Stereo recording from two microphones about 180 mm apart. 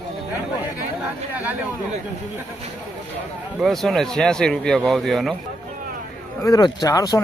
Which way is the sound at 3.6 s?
Centre (ahead or behind).